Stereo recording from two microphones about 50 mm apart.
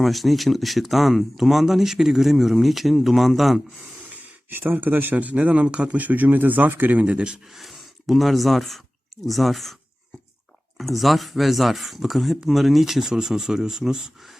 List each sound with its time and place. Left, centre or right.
0.0 s speech: centre
4.1 s speech: right
7.0 s speech: right
7.4 s speech: centre
10.8 s speech: centre